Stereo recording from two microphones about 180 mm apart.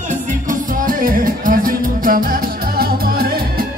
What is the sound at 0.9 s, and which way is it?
Music, 50° right (ahead or behind).